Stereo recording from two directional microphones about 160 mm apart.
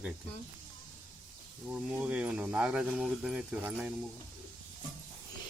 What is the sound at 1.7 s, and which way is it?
Speech, 5° right (ahead or behind).